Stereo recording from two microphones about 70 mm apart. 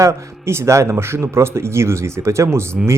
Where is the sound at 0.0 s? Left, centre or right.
Right.